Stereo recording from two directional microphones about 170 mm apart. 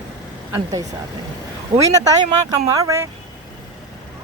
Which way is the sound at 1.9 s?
20° right (ahead or behind).